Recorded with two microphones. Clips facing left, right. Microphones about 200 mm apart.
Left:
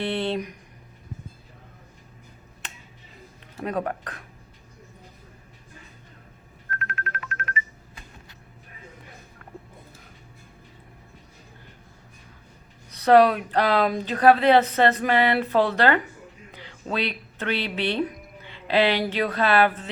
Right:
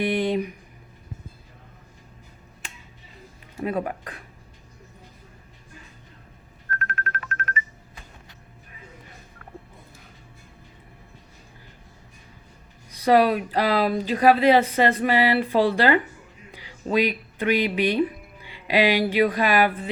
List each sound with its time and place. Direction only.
0.0 s a sound: 15° right (ahead or behind)
3.6 s speech: 5° right (ahead or behind)
6.7 s music: 45° right (ahead or behind)
12.9 s speech: 10° right (ahead or behind)